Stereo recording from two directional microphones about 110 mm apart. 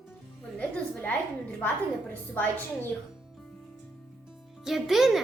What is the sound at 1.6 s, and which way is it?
Speech, 15° left (ahead or behind).